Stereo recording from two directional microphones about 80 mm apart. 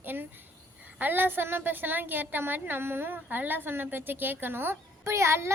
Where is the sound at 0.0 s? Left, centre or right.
Right.